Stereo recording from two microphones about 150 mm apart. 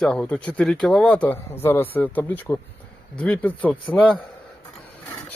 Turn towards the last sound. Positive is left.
turn(degrees=10)  # may be behind; listen again after turning